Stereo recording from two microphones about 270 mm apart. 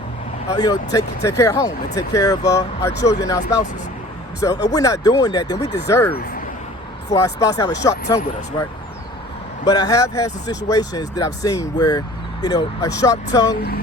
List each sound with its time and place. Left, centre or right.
0.4 s speech: centre
2.9 s speech: left
3.2 s speech: centre
9.6 s speech: centre